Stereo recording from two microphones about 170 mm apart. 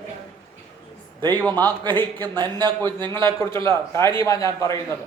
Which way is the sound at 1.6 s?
10° left (ahead or behind).